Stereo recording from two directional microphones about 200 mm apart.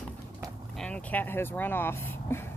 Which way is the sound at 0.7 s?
5° left (ahead or behind).